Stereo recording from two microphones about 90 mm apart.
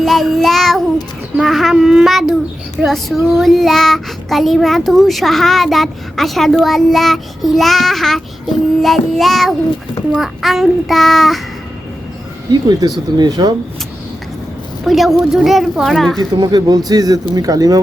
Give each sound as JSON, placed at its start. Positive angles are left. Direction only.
{"t": 0.0, "sound": "child singing", "side_deg": 0}
{"t": 1.4, "sound": "a child's voice", "side_deg": 0}
{"t": 12.5, "sound": "speech", "side_deg": -50}
{"t": 14.8, "sound": "a child's voice", "side_deg": 0}
{"t": 16.4, "sound": "speech", "side_deg": -50}